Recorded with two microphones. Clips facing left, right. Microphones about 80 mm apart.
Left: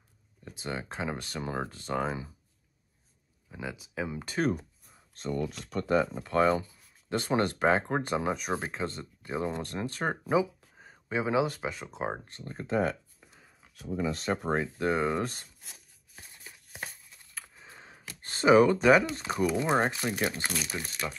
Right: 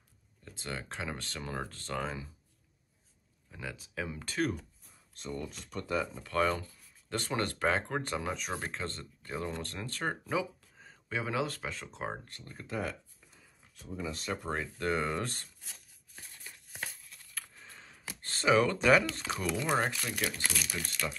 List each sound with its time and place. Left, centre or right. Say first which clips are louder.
0.5 s speech: left 4 dB; centre
3.4 s speech: left 4 dB; centre
5.3 s speech: left 7 dB; left
5.9 s speech: left 7 dB; left
6.2 s speech: left 5 dB; left
12.3 s speech: left 8 dB; left
13.3 s a sound: left 4 dB; left
14.1 s speech: left 6 dB; left
14.5 s speech: left 6 dB; left
14.9 s speech: left 3 dB; centre
16.2 s a sound: left 1 dB; centre
18.2 s speech: left 6 dB; centre
19.4 s speech: left 5 dB; left
21.0 s speech: left 1 dB; centre